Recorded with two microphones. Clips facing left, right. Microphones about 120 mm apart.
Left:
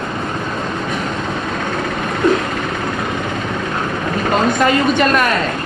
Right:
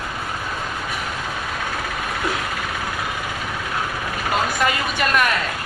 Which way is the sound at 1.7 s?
10° right (ahead or behind).